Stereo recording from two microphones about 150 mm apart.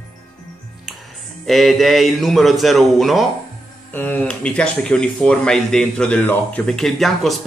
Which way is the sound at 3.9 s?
10° left (ahead or behind).